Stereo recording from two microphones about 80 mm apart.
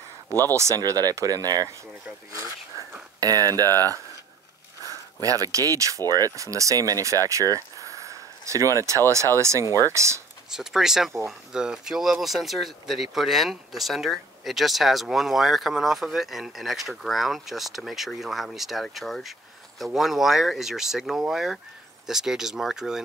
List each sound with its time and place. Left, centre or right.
0.6 s speech: right
3.2 s speech: right
10.5 s speech: centre